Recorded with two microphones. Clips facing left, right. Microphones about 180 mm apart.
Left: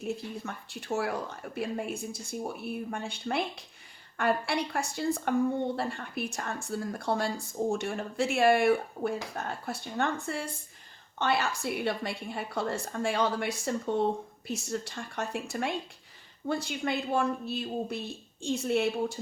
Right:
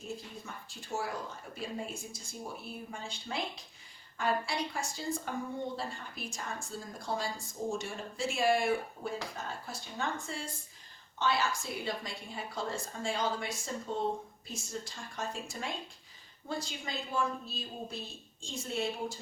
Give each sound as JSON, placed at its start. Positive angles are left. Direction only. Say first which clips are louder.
{"t": 0.0, "sound": "speech", "louder": "left 8 dB", "side_deg": 70}